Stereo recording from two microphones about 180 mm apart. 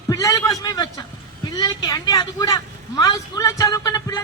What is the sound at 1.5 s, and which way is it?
Speech, 20° left (ahead or behind).